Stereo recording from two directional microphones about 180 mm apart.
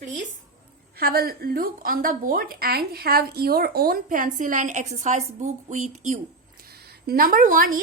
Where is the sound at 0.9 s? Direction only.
55° right (ahead or behind); by 6.1 s 40° right (ahead or behind).